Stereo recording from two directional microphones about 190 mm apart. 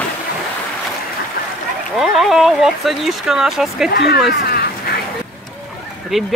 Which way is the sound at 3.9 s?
55° left (ahead or behind).